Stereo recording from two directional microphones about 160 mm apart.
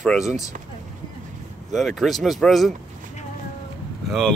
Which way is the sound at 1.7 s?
Centre (ahead or behind).